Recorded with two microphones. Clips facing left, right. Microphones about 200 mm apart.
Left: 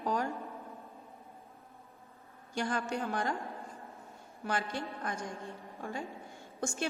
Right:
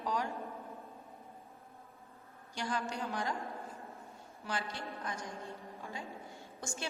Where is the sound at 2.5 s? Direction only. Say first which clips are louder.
Left 4 dB; 50° left (ahead or behind).